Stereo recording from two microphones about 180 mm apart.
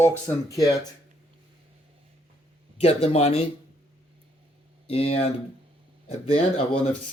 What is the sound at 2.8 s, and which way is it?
Speech, 35° left (ahead or behind).